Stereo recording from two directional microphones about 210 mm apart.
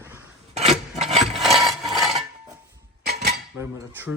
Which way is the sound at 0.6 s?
Centre (ahead or behind).